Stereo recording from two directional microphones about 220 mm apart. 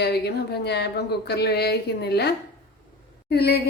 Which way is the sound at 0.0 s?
50° left (ahead or behind).